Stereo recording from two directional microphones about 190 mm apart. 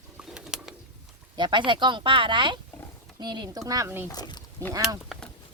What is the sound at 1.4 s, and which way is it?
Speech, 25° right (ahead or behind).